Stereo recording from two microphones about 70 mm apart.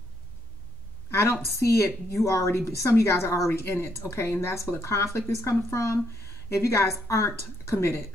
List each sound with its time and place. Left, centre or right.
1.1 s a woman's voice: left